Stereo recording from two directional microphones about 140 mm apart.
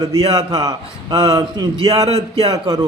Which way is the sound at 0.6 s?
30° right (ahead or behind).